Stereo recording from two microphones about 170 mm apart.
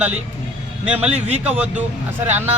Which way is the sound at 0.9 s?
10° right (ahead or behind).